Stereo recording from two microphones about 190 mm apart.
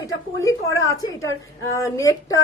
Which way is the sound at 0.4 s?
15° left (ahead or behind).